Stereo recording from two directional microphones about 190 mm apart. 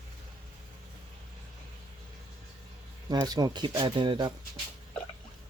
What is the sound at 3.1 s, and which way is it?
Speech, 20° right (ahead or behind).